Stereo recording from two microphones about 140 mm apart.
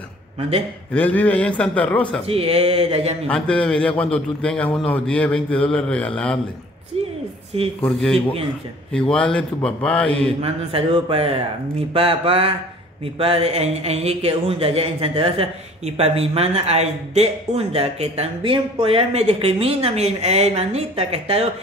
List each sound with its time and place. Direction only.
0.9 s a man's voice: 10° left (ahead or behind)
2.2 s speech: 45° right (ahead or behind)
3.3 s a man's voice: 10° left (ahead or behind)
6.9 s a sound: 45° right (ahead or behind)
7.8 s a man's voice: 5° left (ahead or behind)
10.4 s speech: 40° right (ahead or behind)
11.9 s mantra: 40° right (ahead or behind)
13.0 s speech: 40° right (ahead or behind)